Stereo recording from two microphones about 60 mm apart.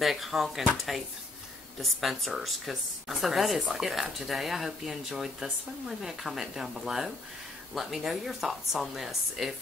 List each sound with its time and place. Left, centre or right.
0.0 s speech: centre
1.8 s speech: centre